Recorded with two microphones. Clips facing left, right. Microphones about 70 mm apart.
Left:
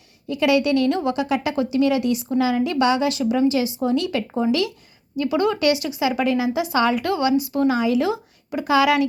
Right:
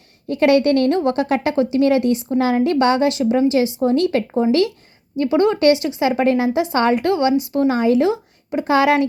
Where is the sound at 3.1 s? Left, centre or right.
Right.